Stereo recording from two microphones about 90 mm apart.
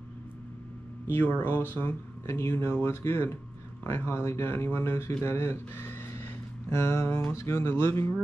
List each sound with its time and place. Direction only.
1.0 s speech: 20° left (ahead or behind)